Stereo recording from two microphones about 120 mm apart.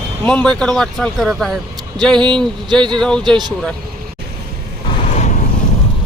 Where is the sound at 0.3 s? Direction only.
5° left (ahead or behind).